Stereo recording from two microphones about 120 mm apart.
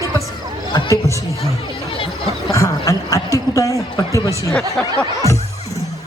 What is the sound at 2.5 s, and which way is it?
Speech, 25° left (ahead or behind).